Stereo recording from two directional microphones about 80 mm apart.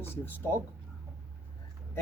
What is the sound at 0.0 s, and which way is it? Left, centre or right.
Speech, left.